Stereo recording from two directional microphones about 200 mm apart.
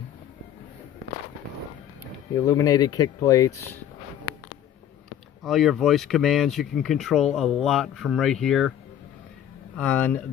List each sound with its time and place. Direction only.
2.3 s speech: 15° left (ahead or behind)
5.4 s speech: centre (ahead or behind)
9.8 s speech: 5° left (ahead or behind)